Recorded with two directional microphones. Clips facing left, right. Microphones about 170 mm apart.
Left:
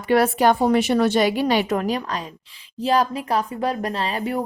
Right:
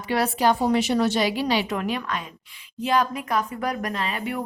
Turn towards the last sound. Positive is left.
turn(degrees=35)  # may be behind; listen again after turning